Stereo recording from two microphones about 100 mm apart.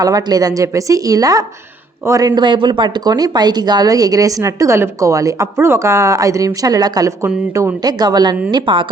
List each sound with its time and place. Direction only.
0.0 s a woman's voice: 40° right (ahead or behind)